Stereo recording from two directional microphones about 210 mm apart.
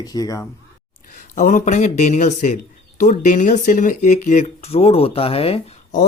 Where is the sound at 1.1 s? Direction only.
40° left (ahead or behind).